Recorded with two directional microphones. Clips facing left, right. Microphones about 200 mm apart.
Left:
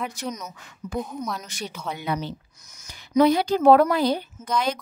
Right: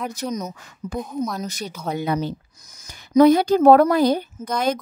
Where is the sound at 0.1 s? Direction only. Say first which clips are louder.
Right 5 dB; 35° right (ahead or behind).